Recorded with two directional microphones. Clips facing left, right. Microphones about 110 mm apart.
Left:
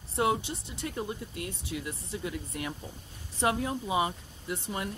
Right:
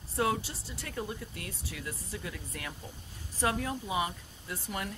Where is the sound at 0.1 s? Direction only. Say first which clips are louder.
Left 3 dB; 20° left (ahead or behind).